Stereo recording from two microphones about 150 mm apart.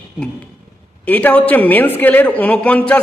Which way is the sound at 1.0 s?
10° left (ahead or behind).